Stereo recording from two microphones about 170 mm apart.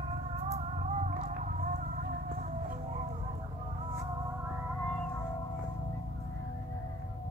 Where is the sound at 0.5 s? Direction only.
40° right (ahead or behind).